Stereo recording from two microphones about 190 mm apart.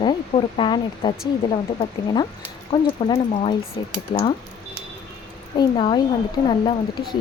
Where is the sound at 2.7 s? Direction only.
25° left (ahead or behind).